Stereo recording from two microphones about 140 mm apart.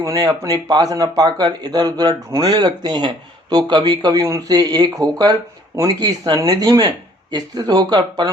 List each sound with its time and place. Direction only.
0.0 s speech: 25° right (ahead or behind)